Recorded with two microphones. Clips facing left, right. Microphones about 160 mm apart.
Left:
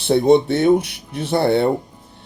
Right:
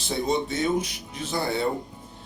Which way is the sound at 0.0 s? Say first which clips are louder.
Left 12 dB; 65° left (ahead or behind).